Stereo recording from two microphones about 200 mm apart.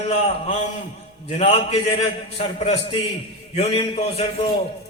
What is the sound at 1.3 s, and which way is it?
A man's voice, 30° left (ahead or behind).